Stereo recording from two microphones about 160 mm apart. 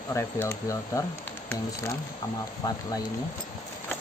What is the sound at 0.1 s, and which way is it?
Speech, 15° left (ahead or behind).